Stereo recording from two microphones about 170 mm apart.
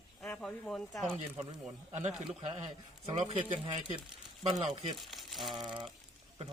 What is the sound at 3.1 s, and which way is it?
Speech, 40° right (ahead or behind).